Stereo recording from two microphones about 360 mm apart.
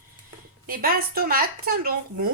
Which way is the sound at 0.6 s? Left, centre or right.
Right.